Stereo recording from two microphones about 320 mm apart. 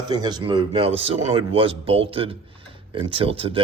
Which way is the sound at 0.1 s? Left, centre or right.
Centre.